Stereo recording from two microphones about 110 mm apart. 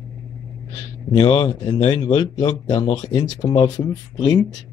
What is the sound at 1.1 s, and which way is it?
Speech, 45° left (ahead or behind).